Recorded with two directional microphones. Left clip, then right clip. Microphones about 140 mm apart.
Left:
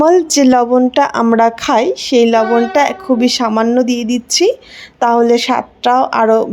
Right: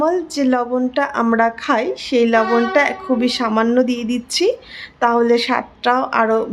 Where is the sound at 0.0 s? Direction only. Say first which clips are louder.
Left 8 dB; 60° left (ahead or behind).